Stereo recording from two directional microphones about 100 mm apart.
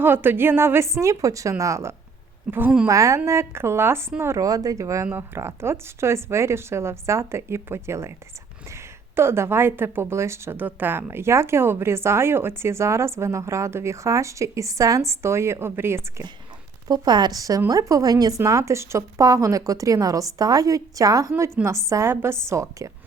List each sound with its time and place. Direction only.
0.0 s a woman's voice: 20° right (ahead or behind)
16.9 s a woman's voice: 45° right (ahead or behind)